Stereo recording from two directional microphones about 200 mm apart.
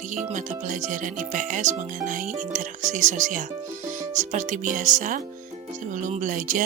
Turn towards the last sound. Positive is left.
turn(degrees=-40)  # may be behind; listen again after turning